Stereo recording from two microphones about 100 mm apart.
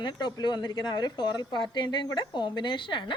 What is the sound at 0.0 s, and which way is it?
A woman's voice, 45° left (ahead or behind).